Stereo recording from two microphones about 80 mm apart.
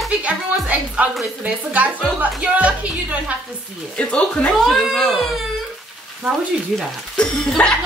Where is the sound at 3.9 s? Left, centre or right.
Centre.